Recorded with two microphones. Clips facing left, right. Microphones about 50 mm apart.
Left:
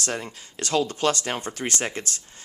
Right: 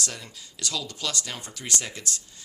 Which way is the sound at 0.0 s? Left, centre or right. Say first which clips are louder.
Left 6 dB; left.